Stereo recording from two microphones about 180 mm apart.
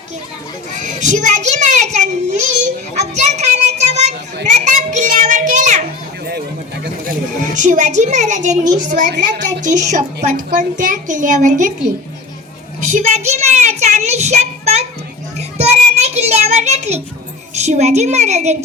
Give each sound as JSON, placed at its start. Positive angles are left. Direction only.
{"t": 0.8, "sound": "child singing", "side_deg": -40}
{"t": 4.4, "sound": "children playing", "side_deg": -45}
{"t": 7.6, "sound": "a woman's voice", "side_deg": -45}
{"t": 12.9, "sound": "a sound", "side_deg": -40}
{"t": 13.8, "sound": "child singing", "side_deg": -40}
{"t": 17.5, "sound": "a woman's voice", "side_deg": -40}